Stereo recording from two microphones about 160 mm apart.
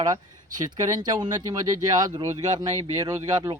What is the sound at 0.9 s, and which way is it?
Speech, 25° right (ahead or behind).